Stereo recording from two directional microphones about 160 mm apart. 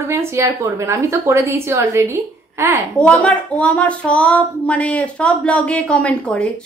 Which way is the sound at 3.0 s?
5° left (ahead or behind).